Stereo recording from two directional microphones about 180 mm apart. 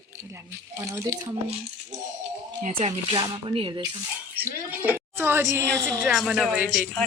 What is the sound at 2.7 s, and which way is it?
Speech, 30° right (ahead or behind).